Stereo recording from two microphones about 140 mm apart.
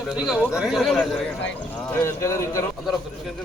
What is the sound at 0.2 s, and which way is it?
Speech, 5° right (ahead or behind).